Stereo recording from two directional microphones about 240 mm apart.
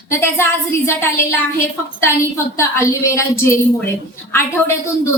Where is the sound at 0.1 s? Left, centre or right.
Centre.